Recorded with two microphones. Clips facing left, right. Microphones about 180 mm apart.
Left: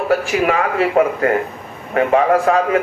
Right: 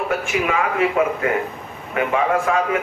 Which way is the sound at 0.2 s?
35° left (ahead or behind).